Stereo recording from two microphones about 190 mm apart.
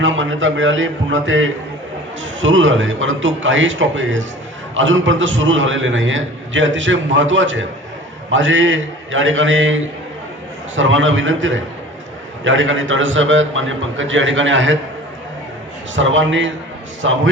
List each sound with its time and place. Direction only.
0.0 s a man's voice: 90° right
16.0 s a man's voice: 85° right